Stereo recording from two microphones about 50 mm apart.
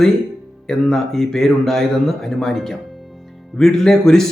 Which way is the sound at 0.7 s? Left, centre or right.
Centre.